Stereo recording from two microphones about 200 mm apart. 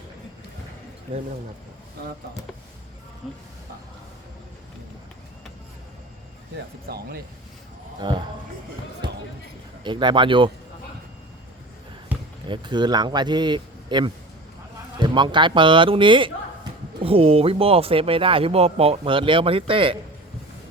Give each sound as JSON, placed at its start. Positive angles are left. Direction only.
{"t": 3.2, "sound": "speech", "side_deg": 0}
{"t": 6.8, "sound": "speech", "side_deg": -50}
{"t": 8.0, "sound": "speech", "side_deg": -20}
{"t": 9.8, "sound": "speech", "side_deg": -25}
{"t": 12.1, "sound": "basketball bounce", "side_deg": -10}
{"t": 12.5, "sound": "speech", "side_deg": -20}